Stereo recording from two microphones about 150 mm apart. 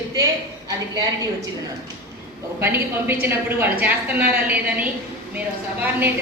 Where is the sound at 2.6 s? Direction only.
15° right (ahead or behind).